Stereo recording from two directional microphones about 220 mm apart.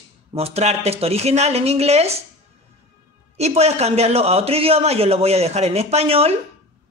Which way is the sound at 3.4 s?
30° right (ahead or behind).